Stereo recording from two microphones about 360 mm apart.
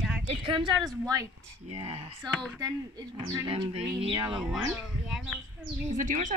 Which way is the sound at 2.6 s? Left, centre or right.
Centre.